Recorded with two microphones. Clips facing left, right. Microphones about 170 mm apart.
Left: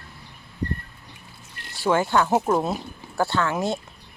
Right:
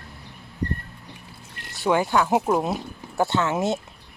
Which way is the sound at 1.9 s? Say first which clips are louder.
Even; 10° right (ahead or behind).